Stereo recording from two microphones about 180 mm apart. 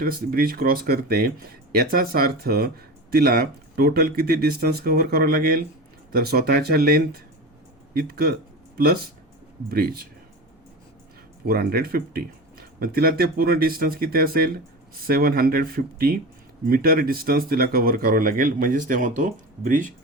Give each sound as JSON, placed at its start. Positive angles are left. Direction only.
{"t": 0.0, "sound": "speech", "side_deg": -55}
{"t": 9.6, "sound": "speech", "side_deg": -55}
{"t": 11.4, "sound": "speech", "side_deg": -55}